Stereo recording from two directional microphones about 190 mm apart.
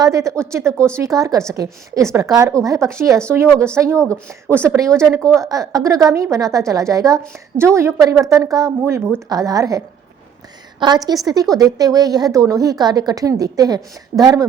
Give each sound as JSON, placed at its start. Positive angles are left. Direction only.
{"t": 0.0, "sound": "a woman's voice", "side_deg": -15}